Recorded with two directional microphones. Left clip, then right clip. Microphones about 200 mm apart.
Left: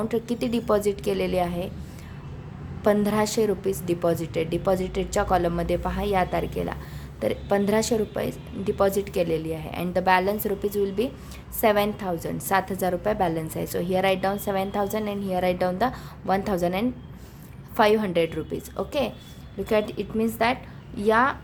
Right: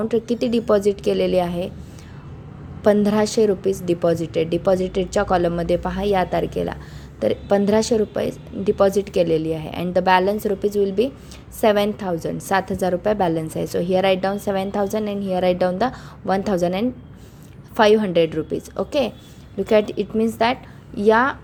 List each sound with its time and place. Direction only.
0.0 s a woman's voice: 15° right (ahead or behind)
2.8 s a woman's voice: 20° right (ahead or behind)